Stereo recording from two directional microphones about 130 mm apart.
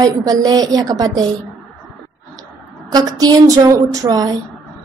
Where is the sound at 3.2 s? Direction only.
25° right (ahead or behind).